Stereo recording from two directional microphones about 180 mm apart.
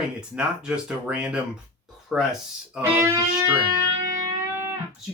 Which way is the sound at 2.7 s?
15° right (ahead or behind).